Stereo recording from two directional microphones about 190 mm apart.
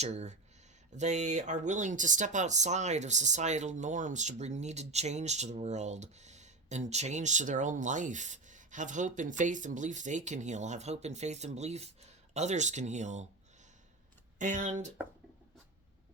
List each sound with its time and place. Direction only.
0.0 s speech: 35° right (ahead or behind)
14.3 s speech: 40° right (ahead or behind)